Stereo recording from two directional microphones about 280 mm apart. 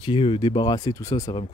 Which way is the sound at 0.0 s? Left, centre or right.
Centre.